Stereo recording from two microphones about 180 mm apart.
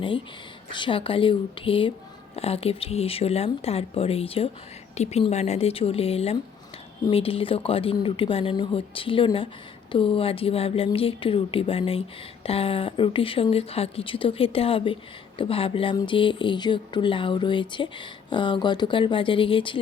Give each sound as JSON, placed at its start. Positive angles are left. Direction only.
{"t": 0.7, "sound": "speech", "side_deg": 25}